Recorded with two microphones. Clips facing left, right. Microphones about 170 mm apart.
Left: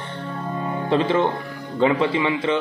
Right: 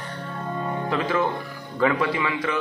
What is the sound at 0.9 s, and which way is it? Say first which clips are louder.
A man's voice: left 6 dB; 30° left (ahead or behind).